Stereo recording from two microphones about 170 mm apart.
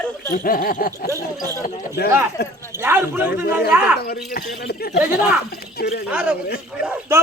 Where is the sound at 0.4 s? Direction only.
55° left (ahead or behind).